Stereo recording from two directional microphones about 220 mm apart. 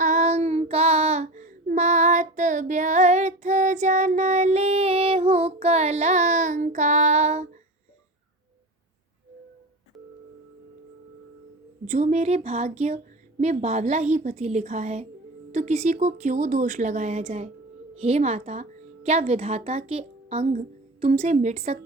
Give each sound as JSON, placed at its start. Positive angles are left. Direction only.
{"t": 0.0, "sound": "child singing", "side_deg": -30}
{"t": 11.9, "sound": "speech", "side_deg": -30}